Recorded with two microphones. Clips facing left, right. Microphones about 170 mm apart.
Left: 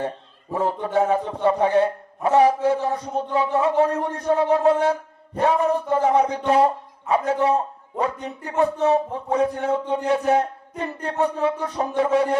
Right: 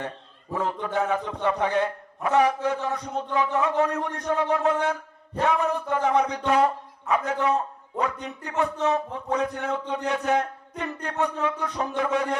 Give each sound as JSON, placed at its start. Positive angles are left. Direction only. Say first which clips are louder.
{"t": 0.5, "sound": "a man's voice", "louder": "left 5 dB", "side_deg": 35}